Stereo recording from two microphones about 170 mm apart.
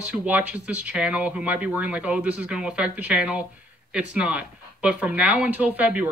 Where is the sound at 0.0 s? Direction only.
5° right (ahead or behind).